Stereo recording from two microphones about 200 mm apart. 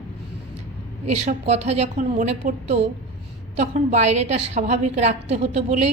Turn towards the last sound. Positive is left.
turn(degrees=-35)  # may be behind; listen again after turning